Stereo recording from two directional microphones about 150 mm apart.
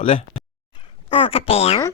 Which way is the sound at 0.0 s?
40° left (ahead or behind).